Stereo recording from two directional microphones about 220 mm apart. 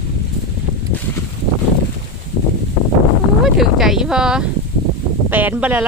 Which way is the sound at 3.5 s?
Centre (ahead or behind).